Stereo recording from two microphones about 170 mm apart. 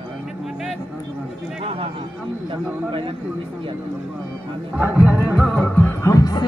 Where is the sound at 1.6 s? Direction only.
35° right (ahead or behind).